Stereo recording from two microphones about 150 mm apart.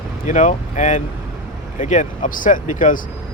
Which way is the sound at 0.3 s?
55° left (ahead or behind).